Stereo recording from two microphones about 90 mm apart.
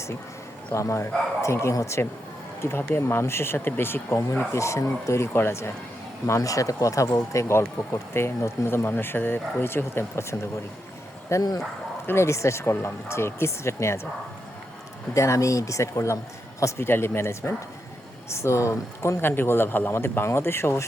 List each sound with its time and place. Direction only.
0.7 s speech: 35° left (ahead or behind)
15.1 s speech: 35° left (ahead or behind)